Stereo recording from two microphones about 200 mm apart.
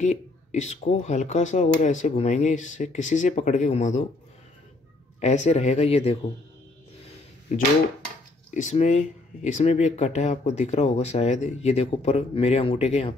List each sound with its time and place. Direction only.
0.0 s speech: 35° left (ahead or behind)
5.2 s speech: 35° left (ahead or behind)
8.5 s speech: 35° left (ahead or behind)